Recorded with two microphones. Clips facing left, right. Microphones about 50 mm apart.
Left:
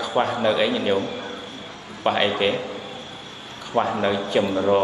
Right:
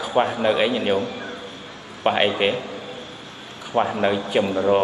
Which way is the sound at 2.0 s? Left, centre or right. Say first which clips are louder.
Right 1 dB; right.